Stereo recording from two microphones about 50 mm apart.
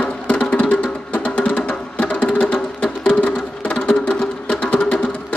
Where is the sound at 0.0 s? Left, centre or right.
Left.